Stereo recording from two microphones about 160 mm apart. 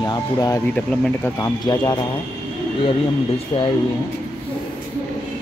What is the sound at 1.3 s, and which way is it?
Speech, 20° left (ahead or behind).